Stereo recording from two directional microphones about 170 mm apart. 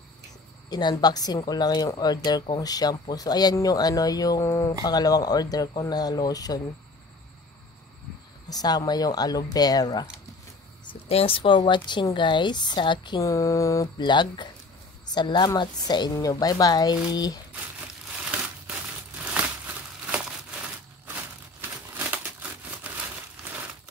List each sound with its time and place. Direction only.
0.7 s speech: 25° left (ahead or behind)
8.5 s speech: 20° left (ahead or behind)
10.9 s speech: 35° left (ahead or behind)
21.5 s a sound: 10° right (ahead or behind)